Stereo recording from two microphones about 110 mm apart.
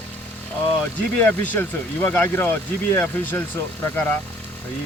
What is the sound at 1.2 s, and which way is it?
Speech, 20° left (ahead or behind).